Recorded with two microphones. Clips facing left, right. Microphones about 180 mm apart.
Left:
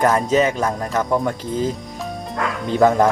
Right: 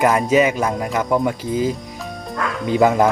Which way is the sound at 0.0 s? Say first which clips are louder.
Right 1 dB; 10° right (ahead or behind).